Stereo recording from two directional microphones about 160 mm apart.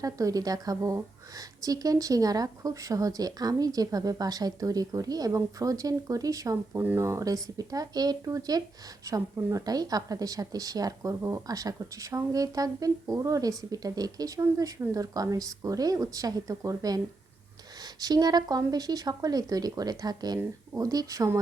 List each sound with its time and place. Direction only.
0.0 s speech: 20° right (ahead or behind)